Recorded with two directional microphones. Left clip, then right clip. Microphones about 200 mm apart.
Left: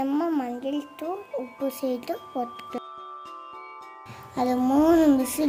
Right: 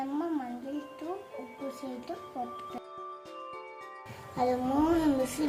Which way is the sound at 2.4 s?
35° left (ahead or behind).